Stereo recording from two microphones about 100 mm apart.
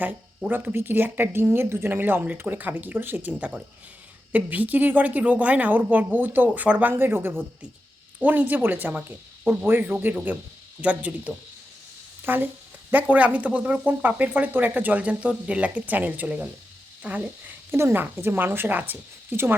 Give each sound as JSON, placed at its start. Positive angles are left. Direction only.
{"t": 0.0, "sound": "speech", "side_deg": -15}
{"t": 17.7, "sound": "speech", "side_deg": -25}